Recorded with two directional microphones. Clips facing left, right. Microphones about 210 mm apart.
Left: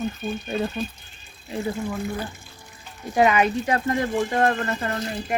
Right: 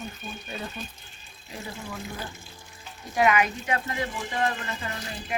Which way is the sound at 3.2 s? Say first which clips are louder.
Left 4 dB; 30° left (ahead or behind).